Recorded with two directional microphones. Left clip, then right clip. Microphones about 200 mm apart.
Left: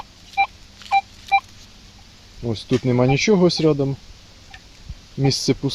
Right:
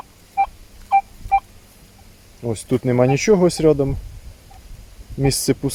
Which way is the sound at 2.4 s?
5° right (ahead or behind).